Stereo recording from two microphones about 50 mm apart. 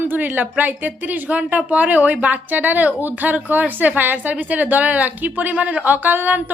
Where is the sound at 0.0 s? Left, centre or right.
Right.